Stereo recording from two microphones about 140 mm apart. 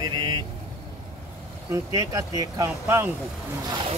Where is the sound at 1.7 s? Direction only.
25° right (ahead or behind).